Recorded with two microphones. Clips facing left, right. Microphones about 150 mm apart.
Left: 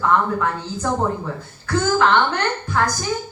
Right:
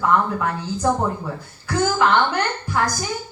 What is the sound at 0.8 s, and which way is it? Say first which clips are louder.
Speech: right 1 dB; 10° right (ahead or behind).